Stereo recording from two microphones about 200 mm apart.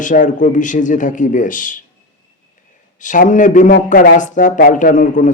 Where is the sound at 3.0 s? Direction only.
40° left (ahead or behind).